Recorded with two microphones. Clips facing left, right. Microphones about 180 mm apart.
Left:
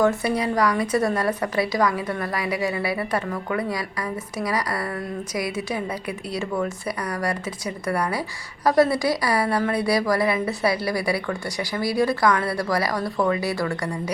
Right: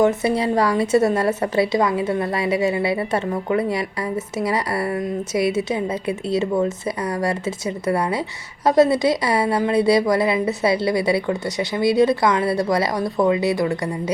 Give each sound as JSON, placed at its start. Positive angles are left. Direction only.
{"t": 0.0, "sound": "a woman's voice", "side_deg": -20}